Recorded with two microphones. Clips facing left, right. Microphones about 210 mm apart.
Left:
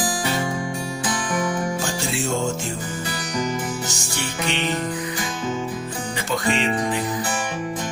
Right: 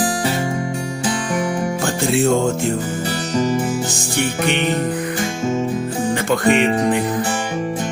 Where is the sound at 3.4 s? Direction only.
25° right (ahead or behind).